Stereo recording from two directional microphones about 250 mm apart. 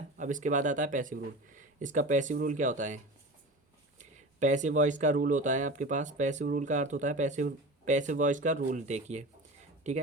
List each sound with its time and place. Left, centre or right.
0.2 s speech: right
4.4 s speech: right